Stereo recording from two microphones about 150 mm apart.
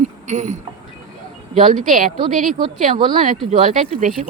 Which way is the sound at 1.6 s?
60° right (ahead or behind).